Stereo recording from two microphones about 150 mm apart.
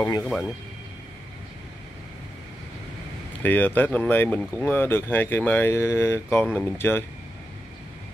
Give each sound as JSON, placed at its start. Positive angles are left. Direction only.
{"t": 0.0, "sound": "speech", "side_deg": 20}
{"t": 3.4, "sound": "speech", "side_deg": 10}